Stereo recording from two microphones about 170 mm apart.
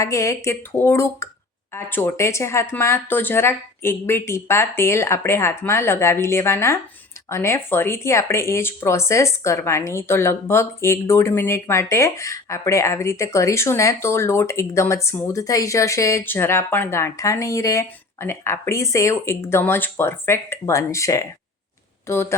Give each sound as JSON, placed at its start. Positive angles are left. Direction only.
{"t": 0.0, "sound": "speech", "side_deg": 20}